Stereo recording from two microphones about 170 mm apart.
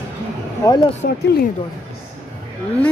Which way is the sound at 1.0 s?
65° left (ahead or behind).